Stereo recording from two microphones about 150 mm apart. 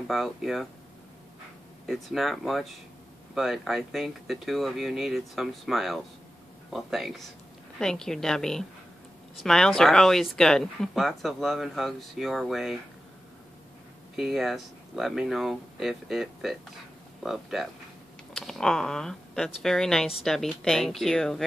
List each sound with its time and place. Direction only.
0.1 s speech: centre (ahead or behind)
1.9 s speech: centre (ahead or behind)
14.1 s speech: centre (ahead or behind)